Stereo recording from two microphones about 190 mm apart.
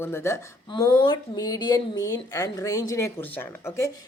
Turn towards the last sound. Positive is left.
turn(degrees=15)  # may be behind; listen again after turning